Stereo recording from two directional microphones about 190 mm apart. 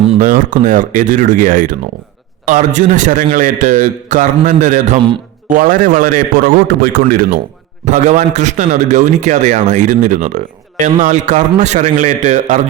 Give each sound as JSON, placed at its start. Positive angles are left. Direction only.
{"t": 0.2, "sound": "a man's voice", "side_deg": -45}